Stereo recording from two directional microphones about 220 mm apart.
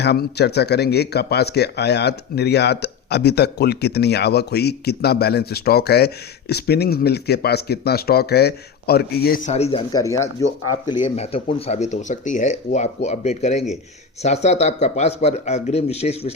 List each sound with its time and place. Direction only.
0.0 s speech: 50° left (ahead or behind); by 10.0 s 25° left (ahead or behind)
10.0 s speech: 15° left (ahead or behind)
11.0 s speech: 25° left (ahead or behind)